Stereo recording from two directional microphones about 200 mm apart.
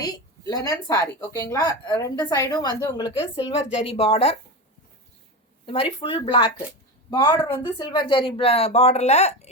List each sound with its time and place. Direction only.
0.0 s a woman's voice: 20° left (ahead or behind)
5.6 s a woman's voice: 25° left (ahead or behind)